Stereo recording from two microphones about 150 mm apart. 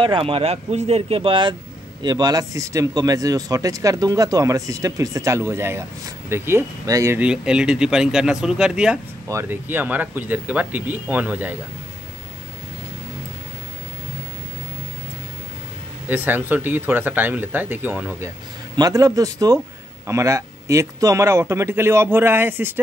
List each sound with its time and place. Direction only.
0.0 s speech: 35° right (ahead or behind); by 7.2 s 20° right (ahead or behind)
7.2 s a man's voice: 5° right (ahead or behind)
16.1 s a man's voice: 10° right (ahead or behind)
18.8 s a man's voice: 20° right (ahead or behind)